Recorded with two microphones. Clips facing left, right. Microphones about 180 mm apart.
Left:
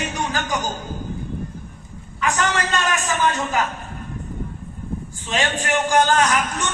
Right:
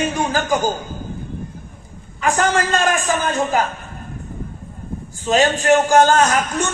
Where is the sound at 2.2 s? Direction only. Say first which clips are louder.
Right 4 dB; 45° right (ahead or behind).